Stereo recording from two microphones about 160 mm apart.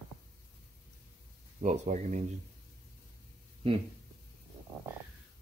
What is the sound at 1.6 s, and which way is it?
Speech, 50° right (ahead or behind).